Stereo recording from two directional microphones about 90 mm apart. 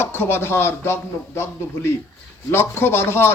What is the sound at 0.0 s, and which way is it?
Speech, 25° left (ahead or behind).